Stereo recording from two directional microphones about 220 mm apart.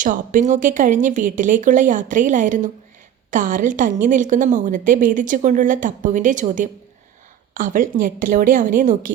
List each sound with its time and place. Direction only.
0.0 s a woman's voice: 35° right (ahead or behind)